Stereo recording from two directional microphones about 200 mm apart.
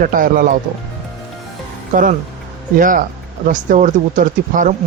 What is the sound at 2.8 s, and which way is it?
Speech, 40° right (ahead or behind).